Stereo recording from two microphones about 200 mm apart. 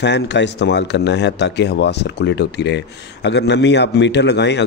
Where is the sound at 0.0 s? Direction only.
60° left (ahead or behind).